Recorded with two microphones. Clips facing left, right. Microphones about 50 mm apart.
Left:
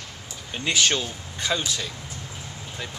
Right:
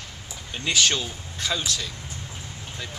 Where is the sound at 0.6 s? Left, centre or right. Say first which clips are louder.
Even; centre.